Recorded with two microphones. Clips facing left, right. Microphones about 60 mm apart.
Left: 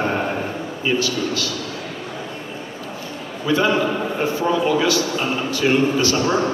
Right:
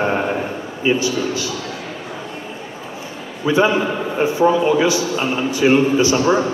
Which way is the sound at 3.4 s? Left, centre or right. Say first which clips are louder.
Right 2 dB; centre.